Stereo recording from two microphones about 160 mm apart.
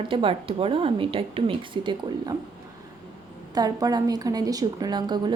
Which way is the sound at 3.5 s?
25° right (ahead or behind).